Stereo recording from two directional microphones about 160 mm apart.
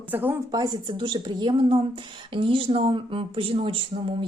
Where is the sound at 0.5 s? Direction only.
25° right (ahead or behind).